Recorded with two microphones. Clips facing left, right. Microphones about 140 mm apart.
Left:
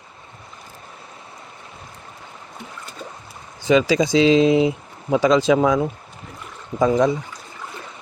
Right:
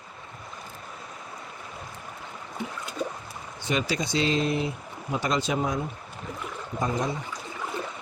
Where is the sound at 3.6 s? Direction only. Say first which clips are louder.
Left 12 dB; 90° left.